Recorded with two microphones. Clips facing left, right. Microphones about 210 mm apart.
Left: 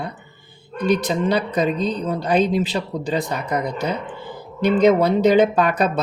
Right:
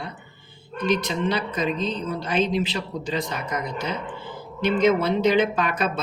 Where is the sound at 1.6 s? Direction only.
40° left (ahead or behind).